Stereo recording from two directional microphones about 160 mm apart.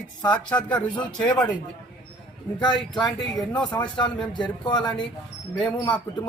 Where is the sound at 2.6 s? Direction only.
30° left (ahead or behind).